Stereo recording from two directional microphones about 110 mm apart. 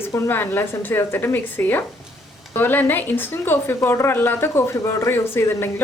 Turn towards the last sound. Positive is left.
turn(degrees=20)  # may be behind; listen again after turning